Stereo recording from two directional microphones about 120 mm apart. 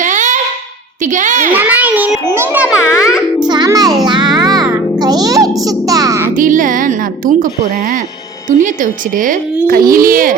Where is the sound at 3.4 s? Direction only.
35° right (ahead or behind).